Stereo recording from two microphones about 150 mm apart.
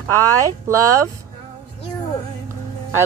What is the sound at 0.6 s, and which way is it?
Speech, 20° right (ahead or behind).